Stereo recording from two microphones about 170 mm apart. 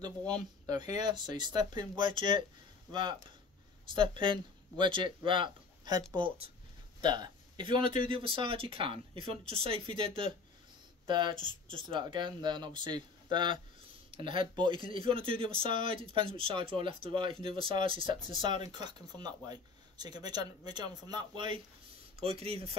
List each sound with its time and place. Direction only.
0.7 s speech: 25° right (ahead or behind)